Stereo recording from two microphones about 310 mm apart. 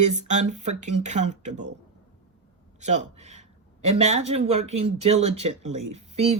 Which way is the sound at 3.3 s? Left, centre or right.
Right.